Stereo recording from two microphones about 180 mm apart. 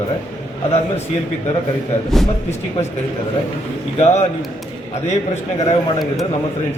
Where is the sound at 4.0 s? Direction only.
40° left (ahead or behind).